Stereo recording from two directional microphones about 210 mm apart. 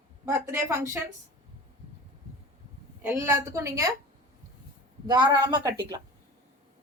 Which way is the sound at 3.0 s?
10° right (ahead or behind).